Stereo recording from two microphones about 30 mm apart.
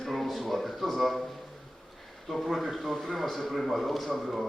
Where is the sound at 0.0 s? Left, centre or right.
Centre.